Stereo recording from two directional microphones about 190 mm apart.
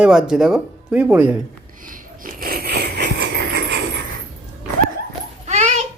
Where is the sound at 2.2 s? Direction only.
50° right (ahead or behind).